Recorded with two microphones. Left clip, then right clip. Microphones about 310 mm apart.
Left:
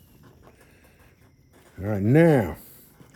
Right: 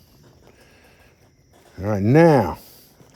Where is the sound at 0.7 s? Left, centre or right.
Right.